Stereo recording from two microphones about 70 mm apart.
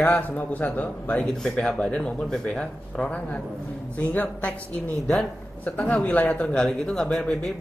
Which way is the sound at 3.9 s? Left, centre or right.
Left.